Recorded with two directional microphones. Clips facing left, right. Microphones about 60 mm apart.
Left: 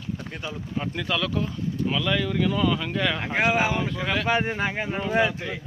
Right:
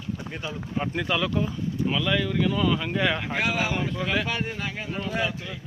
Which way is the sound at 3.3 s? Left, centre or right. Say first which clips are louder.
Left 4 dB; left.